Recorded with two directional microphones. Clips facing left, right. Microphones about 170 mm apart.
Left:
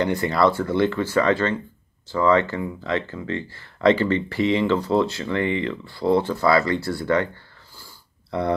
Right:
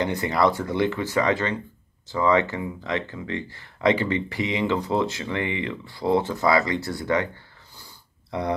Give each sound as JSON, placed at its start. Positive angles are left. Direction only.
{"t": 0.0, "sound": "speech", "side_deg": -20}
{"t": 7.7, "sound": "wheeze", "side_deg": -20}